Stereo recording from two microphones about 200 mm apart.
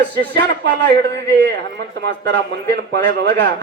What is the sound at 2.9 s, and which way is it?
Speech, 60° right (ahead or behind).